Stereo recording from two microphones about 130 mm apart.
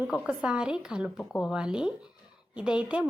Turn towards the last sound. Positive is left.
turn(degrees=-10)  # may be behind; listen again after turning